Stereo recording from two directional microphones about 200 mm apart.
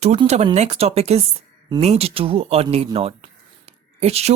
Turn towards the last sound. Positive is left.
turn(degrees=-30)  # may be behind; listen again after turning